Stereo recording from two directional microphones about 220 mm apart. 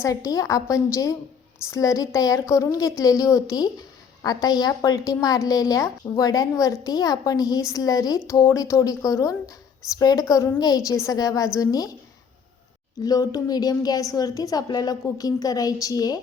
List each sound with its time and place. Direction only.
0.0 s a woman's voice: 15° left (ahead or behind)
13.0 s a woman's voice: 15° left (ahead or behind)